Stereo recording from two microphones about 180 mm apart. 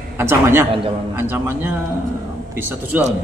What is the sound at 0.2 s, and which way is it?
A man's voice, 15° right (ahead or behind).